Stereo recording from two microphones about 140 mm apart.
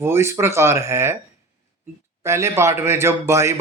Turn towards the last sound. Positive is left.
turn(degrees=-20)  # may be behind; listen again after turning